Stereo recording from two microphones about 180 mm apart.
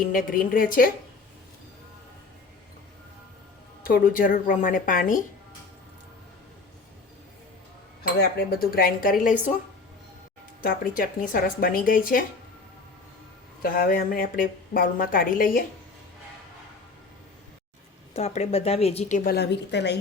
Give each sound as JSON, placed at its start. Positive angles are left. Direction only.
{"t": 0.1, "sound": "a woman's voice", "side_deg": 50}
{"t": 3.8, "sound": "a woman's voice", "side_deg": 50}
{"t": 8.4, "sound": "a woman's voice", "side_deg": 55}
{"t": 10.6, "sound": "a woman's voice", "side_deg": 50}
{"t": 13.6, "sound": "a woman's voice", "side_deg": 50}
{"t": 18.1, "sound": "a woman's voice", "side_deg": 35}
{"t": 19.3, "sound": "a woman's voice", "side_deg": 65}